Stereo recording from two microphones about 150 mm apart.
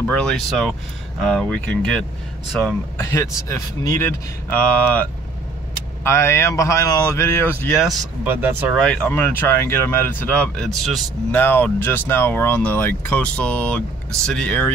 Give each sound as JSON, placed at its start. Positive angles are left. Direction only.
{"t": 0.1, "sound": "speech", "side_deg": 5}
{"t": 3.0, "sound": "speech", "side_deg": 20}
{"t": 7.8, "sound": "speech", "side_deg": 0}
{"t": 8.3, "sound": "speech", "side_deg": -15}
{"t": 8.7, "sound": "speech", "side_deg": 5}